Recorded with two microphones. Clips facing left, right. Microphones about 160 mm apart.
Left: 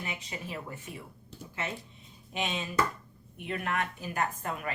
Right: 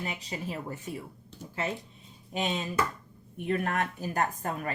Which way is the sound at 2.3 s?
35° right (ahead or behind).